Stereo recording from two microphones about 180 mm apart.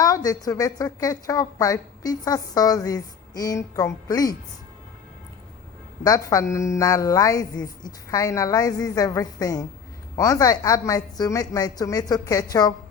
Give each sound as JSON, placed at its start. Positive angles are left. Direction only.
{"t": 0.0, "sound": "a woman's voice", "side_deg": 20}
{"t": 6.0, "sound": "a woman's voice", "side_deg": 20}